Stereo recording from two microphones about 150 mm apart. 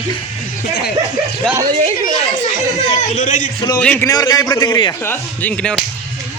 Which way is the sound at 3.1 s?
55° left (ahead or behind).